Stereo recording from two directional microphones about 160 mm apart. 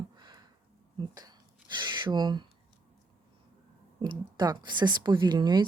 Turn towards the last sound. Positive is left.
turn(degrees=-25)  # may be behind; listen again after turning